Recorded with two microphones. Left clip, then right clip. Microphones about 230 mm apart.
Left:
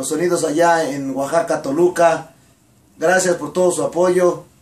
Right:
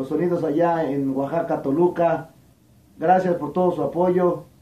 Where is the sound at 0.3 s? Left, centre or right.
Left.